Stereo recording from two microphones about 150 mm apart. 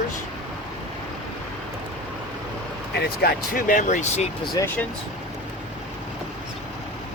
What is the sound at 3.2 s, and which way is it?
Speech, 80° left.